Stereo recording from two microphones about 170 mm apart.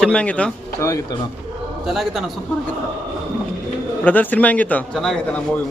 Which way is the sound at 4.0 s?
10° left (ahead or behind).